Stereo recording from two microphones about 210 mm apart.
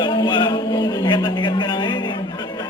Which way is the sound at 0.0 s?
20° left (ahead or behind).